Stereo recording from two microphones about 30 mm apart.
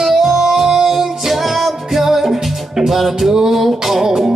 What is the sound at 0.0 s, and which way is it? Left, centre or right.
Music, centre.